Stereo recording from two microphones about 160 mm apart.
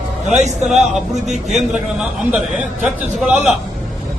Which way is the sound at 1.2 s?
5° right (ahead or behind).